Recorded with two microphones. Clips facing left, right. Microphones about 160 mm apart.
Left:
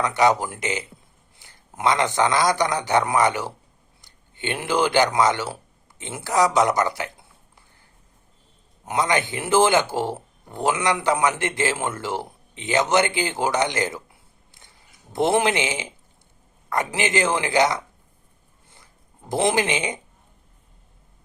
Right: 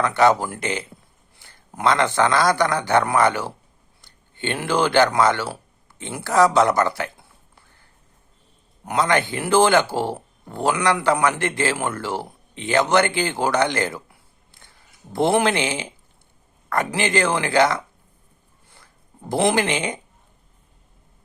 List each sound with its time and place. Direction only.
0.2 s speech: 15° left (ahead or behind)
8.8 s a man's voice: 20° left (ahead or behind)
15.1 s a man's voice: 20° left (ahead or behind)
19.3 s a man's voice: 20° left (ahead or behind)